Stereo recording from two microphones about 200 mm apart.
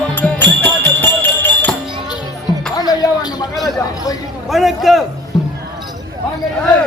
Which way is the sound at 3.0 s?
15° left (ahead or behind).